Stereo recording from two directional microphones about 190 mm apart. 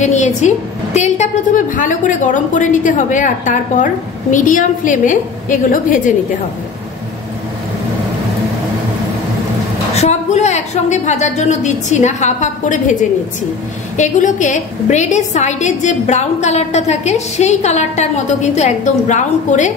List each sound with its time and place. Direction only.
0.0 s a woman's voice: 40° left (ahead or behind)
9.9 s a woman's voice: 35° left (ahead or behind)
13.9 s a woman's voice: 40° left (ahead or behind)